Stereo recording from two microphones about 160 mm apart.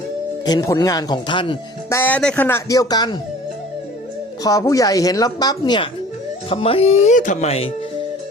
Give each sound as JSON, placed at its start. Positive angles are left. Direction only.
{"t": 0.4, "sound": "a woman's voice", "side_deg": 25}
{"t": 1.9, "sound": "speech", "side_deg": 10}
{"t": 2.6, "sound": "a woman's voice", "side_deg": 25}
{"t": 4.4, "sound": "a woman's voice", "side_deg": 20}